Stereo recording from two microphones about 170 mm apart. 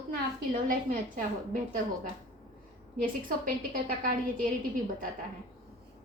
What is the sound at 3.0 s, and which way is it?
A woman's voice, 55° right (ahead or behind).